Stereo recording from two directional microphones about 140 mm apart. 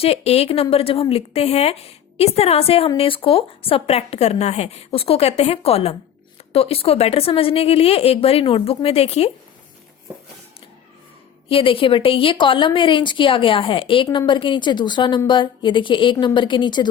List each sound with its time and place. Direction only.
0.0 s a woman's voice: 45° left (ahead or behind)
11.4 s a woman's voice: 40° left (ahead or behind)